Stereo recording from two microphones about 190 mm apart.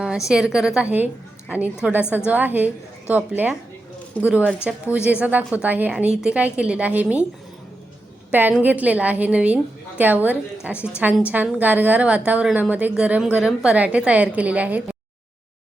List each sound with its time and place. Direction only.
0.3 s a woman's voice: 5° right (ahead or behind)
8.3 s a woman's voice: 10° right (ahead or behind)